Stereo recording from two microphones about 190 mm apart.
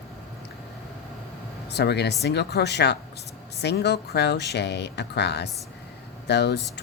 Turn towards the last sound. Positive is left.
turn(degrees=60)  # may be behind; listen again after turning